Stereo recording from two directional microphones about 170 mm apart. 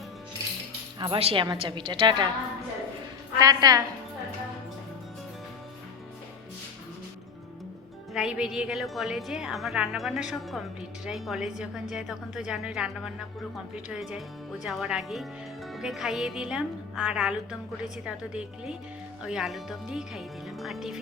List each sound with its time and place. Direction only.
0.9 s a woman's voice: 30° right (ahead or behind)
3.3 s a woman's voice: 20° right (ahead or behind)
8.1 s a woman's voice: 5° right (ahead or behind)